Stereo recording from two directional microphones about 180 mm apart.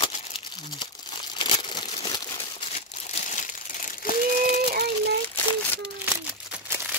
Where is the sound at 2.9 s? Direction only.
40° left (ahead or behind).